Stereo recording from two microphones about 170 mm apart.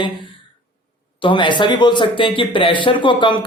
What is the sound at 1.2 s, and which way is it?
Speech, 30° left (ahead or behind).